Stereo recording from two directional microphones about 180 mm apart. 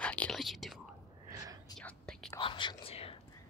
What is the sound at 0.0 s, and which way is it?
Whispering, 5° left (ahead or behind).